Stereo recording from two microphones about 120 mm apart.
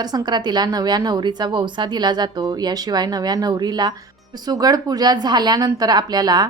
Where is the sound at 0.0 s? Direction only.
35° right (ahead or behind).